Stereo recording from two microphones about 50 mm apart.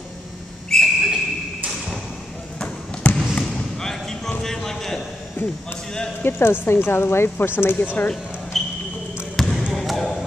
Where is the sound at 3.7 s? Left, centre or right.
Centre.